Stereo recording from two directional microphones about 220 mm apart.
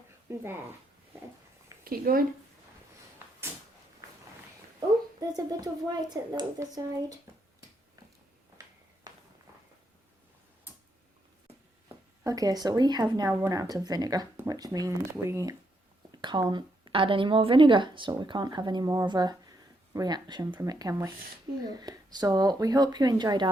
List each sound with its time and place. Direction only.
0.3 s speech: 10° right (ahead or behind)
1.8 s speech: 40° right (ahead or behind)
5.3 s speech: 15° right (ahead or behind)
9.1 s walk: 15° right (ahead or behind)
11.9 s a woman's voice: 15° right (ahead or behind)